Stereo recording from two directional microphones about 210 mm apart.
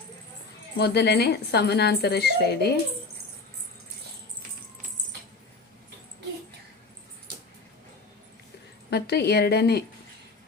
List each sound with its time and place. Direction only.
0.8 s a woman's voice: 50° left (ahead or behind)
8.9 s a woman's voice: 50° left (ahead or behind)